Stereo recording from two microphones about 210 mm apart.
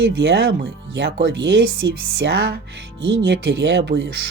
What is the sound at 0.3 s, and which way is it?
Speech, 55° right (ahead or behind).